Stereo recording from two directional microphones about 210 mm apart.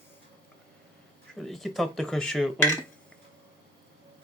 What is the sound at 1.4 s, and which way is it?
Speech, centre (ahead or behind).